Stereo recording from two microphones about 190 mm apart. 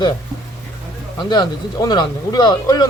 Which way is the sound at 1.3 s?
20° left (ahead or behind).